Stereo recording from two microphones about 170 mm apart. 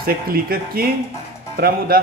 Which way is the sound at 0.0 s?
60° right (ahead or behind).